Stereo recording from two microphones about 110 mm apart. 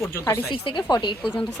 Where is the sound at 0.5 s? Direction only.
45° left (ahead or behind).